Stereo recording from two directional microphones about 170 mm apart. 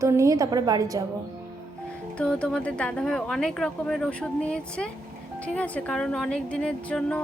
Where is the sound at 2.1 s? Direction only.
5° left (ahead or behind).